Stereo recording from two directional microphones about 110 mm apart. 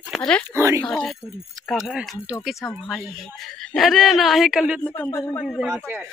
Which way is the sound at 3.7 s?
Centre (ahead or behind).